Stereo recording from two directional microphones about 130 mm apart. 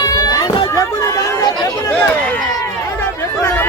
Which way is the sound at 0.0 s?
30° left (ahead or behind).